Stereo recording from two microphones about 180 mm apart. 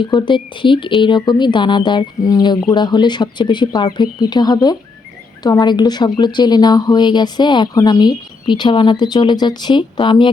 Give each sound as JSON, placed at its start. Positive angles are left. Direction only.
{"t": 0.0, "sound": "speech", "side_deg": 25}